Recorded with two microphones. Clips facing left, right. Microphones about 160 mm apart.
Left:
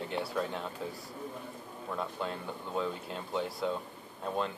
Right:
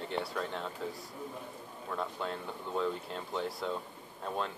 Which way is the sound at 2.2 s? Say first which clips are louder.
Left 1 dB; 5° left (ahead or behind).